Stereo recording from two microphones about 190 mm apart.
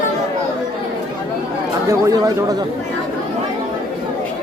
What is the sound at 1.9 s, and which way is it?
Speech, 15° right (ahead or behind).